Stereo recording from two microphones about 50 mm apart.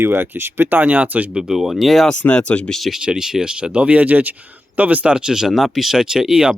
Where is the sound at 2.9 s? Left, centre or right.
Centre.